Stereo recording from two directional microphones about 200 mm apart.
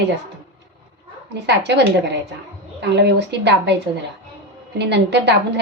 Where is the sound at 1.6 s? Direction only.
60° right (ahead or behind).